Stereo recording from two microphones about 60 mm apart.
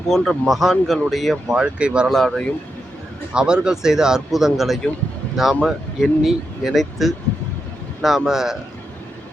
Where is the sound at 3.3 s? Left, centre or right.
Centre.